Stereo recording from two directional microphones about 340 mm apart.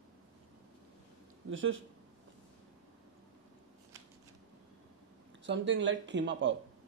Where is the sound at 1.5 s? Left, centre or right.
Right.